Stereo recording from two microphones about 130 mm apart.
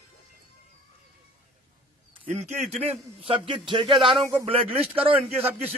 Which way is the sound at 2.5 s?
65° right (ahead or behind).